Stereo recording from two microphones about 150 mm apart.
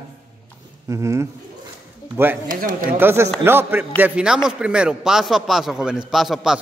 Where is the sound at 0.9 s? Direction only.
20° right (ahead or behind).